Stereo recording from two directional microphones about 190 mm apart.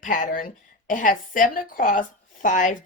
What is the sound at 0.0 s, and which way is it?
A woman's voice, 45° left (ahead or behind).